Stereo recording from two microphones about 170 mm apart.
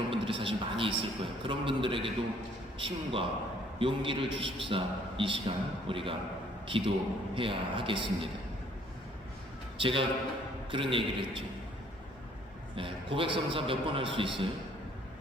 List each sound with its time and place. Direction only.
0.1 s a man's voice: 30° right (ahead or behind)
9.8 s a man's voice: 30° right (ahead or behind)
12.7 s a man's voice: 30° right (ahead or behind)